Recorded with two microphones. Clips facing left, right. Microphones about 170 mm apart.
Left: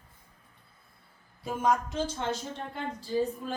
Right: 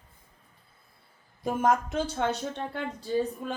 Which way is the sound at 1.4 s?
50° right (ahead or behind).